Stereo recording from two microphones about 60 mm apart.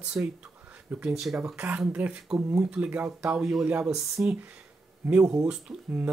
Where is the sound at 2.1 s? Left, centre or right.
Centre; by 4.3 s right.